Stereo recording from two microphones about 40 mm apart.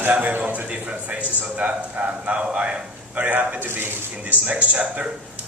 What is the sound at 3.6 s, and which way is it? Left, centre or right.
Speech, right.